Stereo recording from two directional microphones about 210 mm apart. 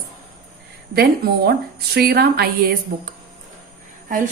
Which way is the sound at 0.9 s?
50° right (ahead or behind).